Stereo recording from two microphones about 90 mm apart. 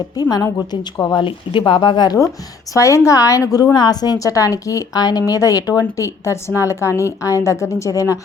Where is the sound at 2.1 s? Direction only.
35° left (ahead or behind).